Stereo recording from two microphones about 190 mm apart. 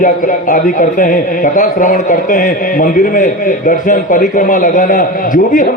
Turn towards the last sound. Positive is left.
turn(degrees=45)  # may be behind; listen again after turning